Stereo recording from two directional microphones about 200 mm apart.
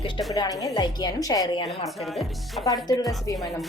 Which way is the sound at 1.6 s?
Centre (ahead or behind).